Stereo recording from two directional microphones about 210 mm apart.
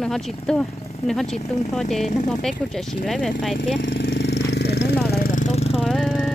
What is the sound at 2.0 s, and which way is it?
Speech, 35° left (ahead or behind).